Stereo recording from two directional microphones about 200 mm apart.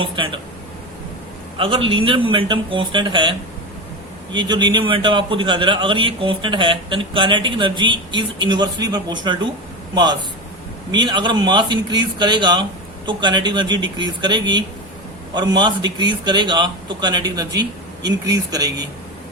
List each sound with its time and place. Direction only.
0.0 s a man's voice: 25° right (ahead or behind)
1.5 s a man's voice: 25° right (ahead or behind)
4.4 s a man's voice: 20° right (ahead or behind)